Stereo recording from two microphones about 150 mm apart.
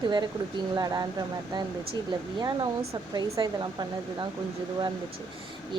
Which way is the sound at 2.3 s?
25° right (ahead or behind).